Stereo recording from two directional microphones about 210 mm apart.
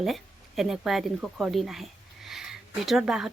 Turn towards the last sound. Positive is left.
turn(degrees=-5)  # may be behind; listen again after turning